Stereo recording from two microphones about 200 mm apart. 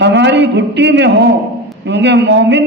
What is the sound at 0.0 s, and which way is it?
A man's voice, 60° right (ahead or behind).